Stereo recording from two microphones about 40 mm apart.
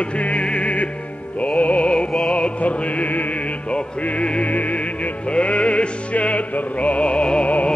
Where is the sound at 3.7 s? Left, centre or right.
Left.